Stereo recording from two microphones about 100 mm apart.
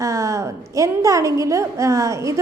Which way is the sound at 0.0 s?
30° right (ahead or behind).